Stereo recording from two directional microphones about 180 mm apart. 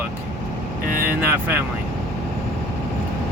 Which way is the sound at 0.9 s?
55° right (ahead or behind).